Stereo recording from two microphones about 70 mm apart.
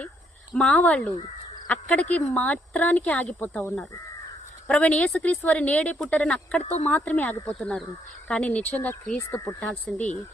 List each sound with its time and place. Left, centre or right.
0.5 s speech: centre
4.7 s a woman's voice: centre